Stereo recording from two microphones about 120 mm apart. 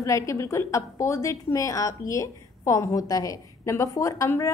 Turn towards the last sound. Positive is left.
turn(degrees=25)  # may be behind; listen again after turning